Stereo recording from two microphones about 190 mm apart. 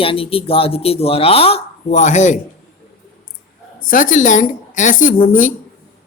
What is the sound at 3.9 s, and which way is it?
A woman's voice, 45° left (ahead or behind).